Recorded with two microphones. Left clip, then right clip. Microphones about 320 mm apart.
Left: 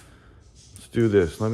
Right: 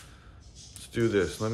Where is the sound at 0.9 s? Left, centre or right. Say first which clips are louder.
Left 6 dB; centre.